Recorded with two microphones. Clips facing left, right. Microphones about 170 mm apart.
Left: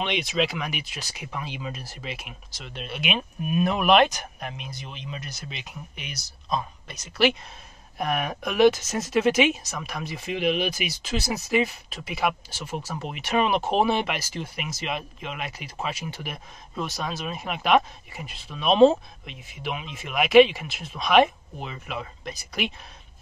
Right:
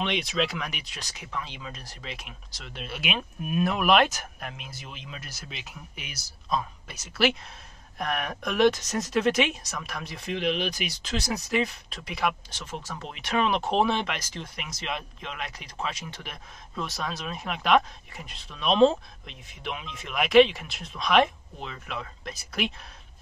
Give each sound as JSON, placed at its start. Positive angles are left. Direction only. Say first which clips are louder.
{"t": 0.0, "sound": "speech", "louder": "left 2 dB", "side_deg": 0}